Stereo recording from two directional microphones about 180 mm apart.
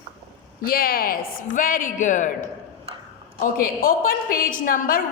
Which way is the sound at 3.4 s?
50° left (ahead or behind).